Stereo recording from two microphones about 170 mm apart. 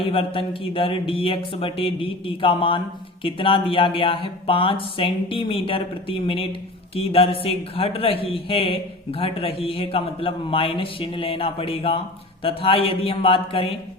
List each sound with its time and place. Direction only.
0.0 s a man's voice: 30° left (ahead or behind)